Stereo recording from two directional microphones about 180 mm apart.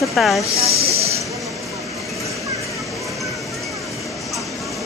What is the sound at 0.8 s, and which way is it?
Train, 35° right (ahead or behind).